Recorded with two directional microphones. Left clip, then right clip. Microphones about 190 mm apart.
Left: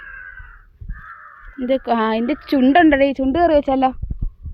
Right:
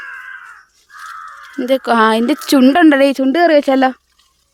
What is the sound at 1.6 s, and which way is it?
Speech, 40° right (ahead or behind).